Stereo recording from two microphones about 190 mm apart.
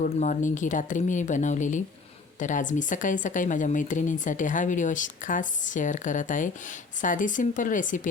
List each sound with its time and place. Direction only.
0.0 s speech: 40° left (ahead or behind)